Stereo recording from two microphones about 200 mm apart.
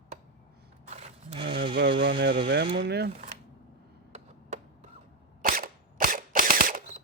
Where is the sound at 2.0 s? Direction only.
60° right (ahead or behind).